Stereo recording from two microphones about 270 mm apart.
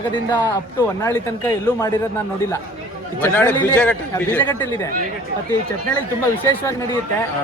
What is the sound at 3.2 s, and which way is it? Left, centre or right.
A man's voice, centre.